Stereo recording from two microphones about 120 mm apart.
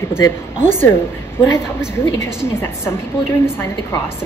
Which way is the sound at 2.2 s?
20° left (ahead or behind).